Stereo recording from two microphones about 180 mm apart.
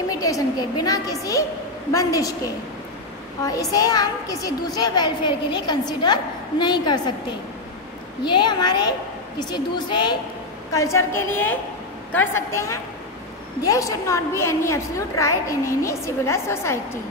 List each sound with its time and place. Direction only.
0.2 s a woman's voice: 20° left (ahead or behind)
3.7 s a woman's voice: 20° left (ahead or behind)
8.4 s a woman's voice: 25° left (ahead or behind)